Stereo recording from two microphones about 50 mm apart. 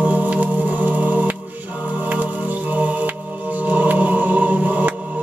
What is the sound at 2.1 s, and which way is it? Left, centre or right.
Music, right.